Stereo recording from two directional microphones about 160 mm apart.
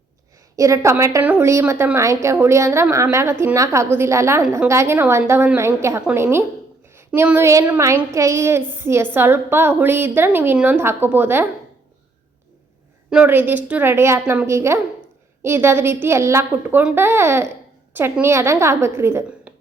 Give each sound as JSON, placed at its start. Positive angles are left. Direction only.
{"t": 0.5, "sound": "a woman's voice", "side_deg": -20}
{"t": 13.1, "sound": "a woman's voice", "side_deg": -10}